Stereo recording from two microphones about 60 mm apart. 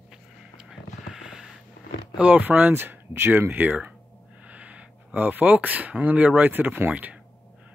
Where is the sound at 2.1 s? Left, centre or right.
Right.